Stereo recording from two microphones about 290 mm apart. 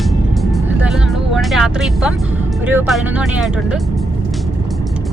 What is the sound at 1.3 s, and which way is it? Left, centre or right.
Speech, centre.